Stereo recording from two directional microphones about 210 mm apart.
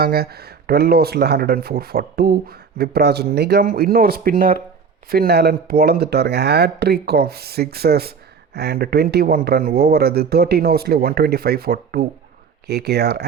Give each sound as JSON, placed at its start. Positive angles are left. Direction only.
{"t": 0.0, "sound": "speech", "side_deg": -45}